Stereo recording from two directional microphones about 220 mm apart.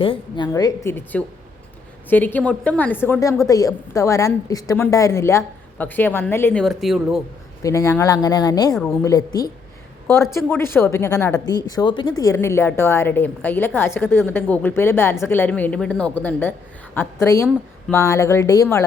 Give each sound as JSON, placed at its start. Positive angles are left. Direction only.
{"t": 0.0, "sound": "a woman's voice", "side_deg": 20}
{"t": 7.6, "sound": "a woman's voice", "side_deg": 15}